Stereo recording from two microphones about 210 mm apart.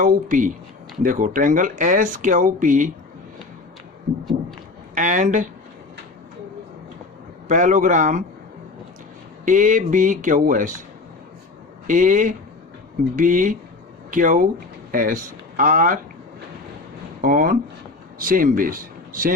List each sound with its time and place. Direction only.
0.0 s speech: 40° right (ahead or behind)
4.9 s speech: 35° right (ahead or behind)
7.4 s speech: 35° right (ahead or behind)
9.4 s speech: 40° right (ahead or behind)
11.9 s speech: 35° right (ahead or behind)
17.2 s speech: 40° right (ahead or behind)